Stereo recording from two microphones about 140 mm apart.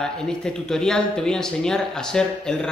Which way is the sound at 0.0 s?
5° left (ahead or behind).